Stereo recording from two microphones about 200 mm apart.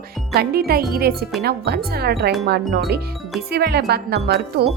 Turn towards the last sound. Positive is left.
turn(degrees=-55)  # may be behind; listen again after turning